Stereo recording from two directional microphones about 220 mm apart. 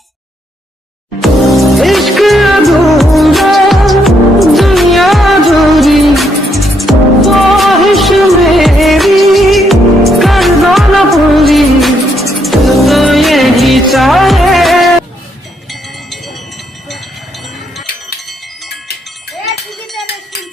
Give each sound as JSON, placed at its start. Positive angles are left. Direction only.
{"t": 1.2, "sound": "music", "side_deg": 0}
{"t": 19.5, "sound": "cowbell", "side_deg": 0}